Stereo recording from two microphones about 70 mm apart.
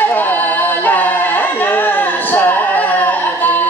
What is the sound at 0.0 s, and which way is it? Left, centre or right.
Music, left.